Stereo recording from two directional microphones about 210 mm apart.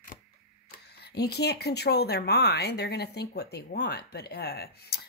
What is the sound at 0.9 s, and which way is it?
Speech, 50° left (ahead or behind).